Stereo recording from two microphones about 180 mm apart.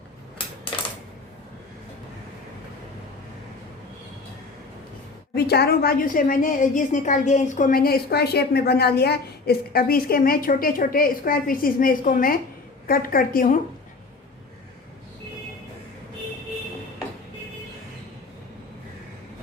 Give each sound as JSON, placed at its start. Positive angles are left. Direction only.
{"t": 5.3, "sound": "a woman's voice", "side_deg": 65}